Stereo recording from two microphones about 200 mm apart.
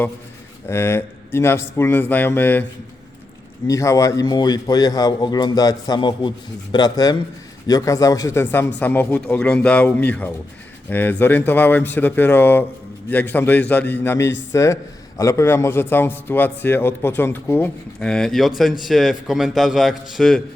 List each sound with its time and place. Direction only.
0.7 s a man's voice: 10° left (ahead or behind)
3.7 s a man's voice: 15° left (ahead or behind); by 20.4 s centre (ahead or behind)